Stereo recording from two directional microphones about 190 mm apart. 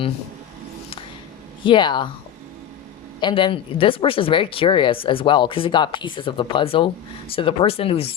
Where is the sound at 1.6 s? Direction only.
25° left (ahead or behind).